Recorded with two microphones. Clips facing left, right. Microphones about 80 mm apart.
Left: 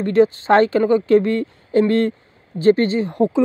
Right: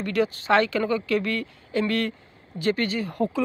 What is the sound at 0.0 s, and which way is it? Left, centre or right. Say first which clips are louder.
A woman's voice: left 9 dB; left.